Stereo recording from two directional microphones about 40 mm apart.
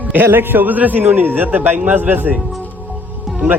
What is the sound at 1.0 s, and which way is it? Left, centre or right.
A man's voice, right.